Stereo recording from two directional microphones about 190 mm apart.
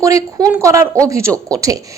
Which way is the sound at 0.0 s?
15° right (ahead or behind).